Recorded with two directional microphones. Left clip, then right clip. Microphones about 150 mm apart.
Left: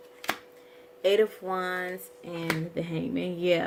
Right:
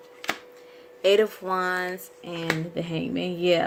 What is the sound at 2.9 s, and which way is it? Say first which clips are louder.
Speech: right 4 dB; 35° right (ahead or behind).